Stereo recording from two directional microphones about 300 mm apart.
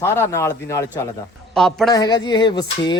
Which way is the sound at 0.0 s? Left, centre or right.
Centre.